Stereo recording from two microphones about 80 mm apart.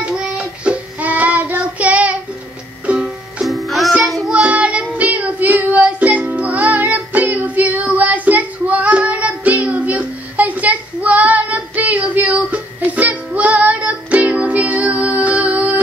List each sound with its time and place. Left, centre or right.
0.0 s child singing: centre
2.9 s music: centre
3.4 s music: centre
4.0 s child singing: centre
4.3 s child singing: centre